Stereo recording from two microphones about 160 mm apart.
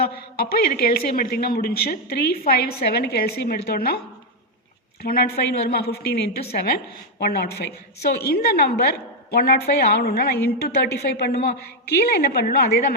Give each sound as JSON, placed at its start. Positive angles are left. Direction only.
{"t": 0.0, "sound": "speech", "side_deg": 70}
{"t": 5.0, "sound": "a woman's voice", "side_deg": 75}
{"t": 9.3, "sound": "a woman's voice", "side_deg": 75}
{"t": 10.6, "sound": "speech", "side_deg": 90}
{"t": 11.4, "sound": "speech", "side_deg": 75}